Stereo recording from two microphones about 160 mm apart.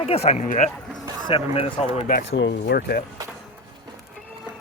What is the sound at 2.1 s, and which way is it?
Speech, 80° left.